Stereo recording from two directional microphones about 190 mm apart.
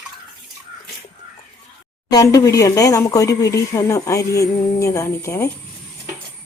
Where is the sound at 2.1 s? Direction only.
20° left (ahead or behind).